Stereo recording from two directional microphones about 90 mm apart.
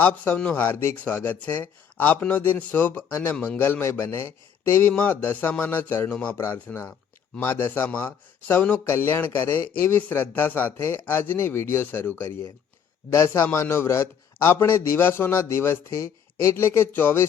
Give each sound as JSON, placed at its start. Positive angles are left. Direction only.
{"t": 0.0, "sound": "a man's voice", "side_deg": 20}